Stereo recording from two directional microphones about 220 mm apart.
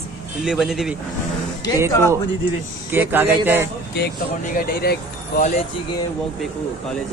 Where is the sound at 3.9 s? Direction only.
50° left (ahead or behind).